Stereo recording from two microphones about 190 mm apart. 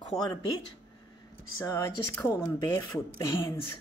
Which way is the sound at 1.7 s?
15° left (ahead or behind).